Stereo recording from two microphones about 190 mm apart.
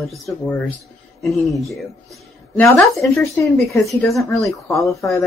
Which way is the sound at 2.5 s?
15° left (ahead or behind).